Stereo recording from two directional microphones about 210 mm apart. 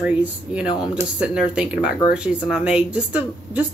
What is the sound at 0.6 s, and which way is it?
Speech, 20° left (ahead or behind).